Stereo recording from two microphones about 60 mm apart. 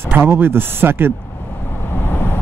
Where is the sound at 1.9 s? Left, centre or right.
Left.